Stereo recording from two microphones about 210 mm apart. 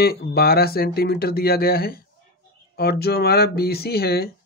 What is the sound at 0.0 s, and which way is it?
Speech, 45° left (ahead or behind).